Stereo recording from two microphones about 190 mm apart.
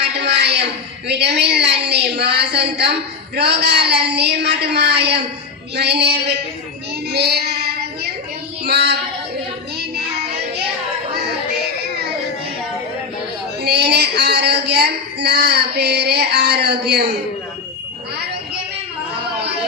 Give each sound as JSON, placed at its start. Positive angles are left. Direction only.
{"t": 0.1, "sound": "a man's voice", "side_deg": -60}
{"t": 7.1, "sound": "child singing", "side_deg": -55}
{"t": 13.6, "sound": "child singing", "side_deg": -60}